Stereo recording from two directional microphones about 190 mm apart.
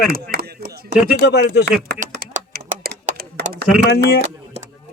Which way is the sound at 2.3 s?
45° right (ahead or behind).